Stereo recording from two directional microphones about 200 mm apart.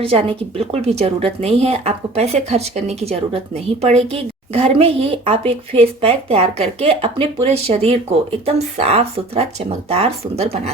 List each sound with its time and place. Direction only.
0.0 s speech: 30° right (ahead or behind)